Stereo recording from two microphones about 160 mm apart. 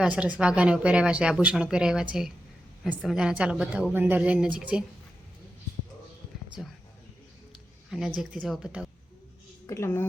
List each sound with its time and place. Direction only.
0.0 s a woman's voice: 10° right (ahead or behind)
7.9 s speech: 5° right (ahead or behind)
9.6 s a woman's voice: 15° left (ahead or behind)